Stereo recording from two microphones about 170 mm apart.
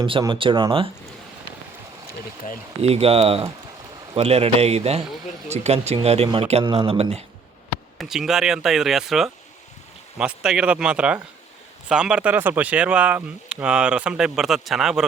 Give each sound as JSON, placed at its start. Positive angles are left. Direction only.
{"t": 0.0, "sound": "speech", "side_deg": -25}
{"t": 2.4, "sound": "speech", "side_deg": 50}
{"t": 2.8, "sound": "speech", "side_deg": -35}
{"t": 7.9, "sound": "speech", "side_deg": 0}